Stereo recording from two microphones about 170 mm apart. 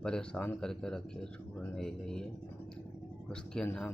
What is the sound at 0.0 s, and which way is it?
Speech, 5° left (ahead or behind).